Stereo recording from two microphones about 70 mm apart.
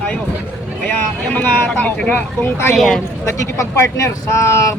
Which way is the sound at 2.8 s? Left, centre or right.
Centre.